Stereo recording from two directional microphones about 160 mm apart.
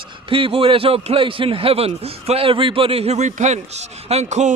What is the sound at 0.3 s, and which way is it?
A man's voice, 35° right (ahead or behind).